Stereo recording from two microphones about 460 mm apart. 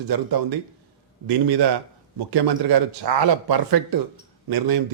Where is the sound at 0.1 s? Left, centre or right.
Right.